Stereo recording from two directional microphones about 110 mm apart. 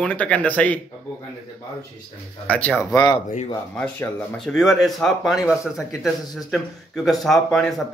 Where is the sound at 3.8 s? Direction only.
15° left (ahead or behind).